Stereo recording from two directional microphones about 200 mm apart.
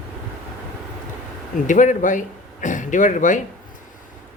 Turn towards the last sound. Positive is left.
turn(degrees=40)  # may be behind; listen again after turning